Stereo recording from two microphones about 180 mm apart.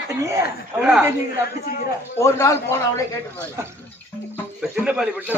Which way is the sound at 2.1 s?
15° left (ahead or behind).